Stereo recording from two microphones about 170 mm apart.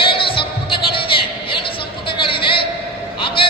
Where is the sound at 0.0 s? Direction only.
30° left (ahead or behind).